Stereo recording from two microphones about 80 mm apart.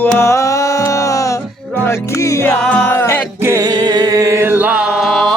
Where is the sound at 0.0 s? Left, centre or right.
Left.